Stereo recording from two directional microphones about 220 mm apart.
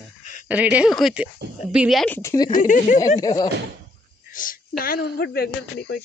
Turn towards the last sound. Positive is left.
turn(degrees=45)  # may be behind; listen again after turning